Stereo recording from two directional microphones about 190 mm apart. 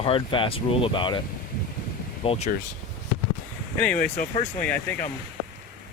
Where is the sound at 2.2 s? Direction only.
35° left (ahead or behind).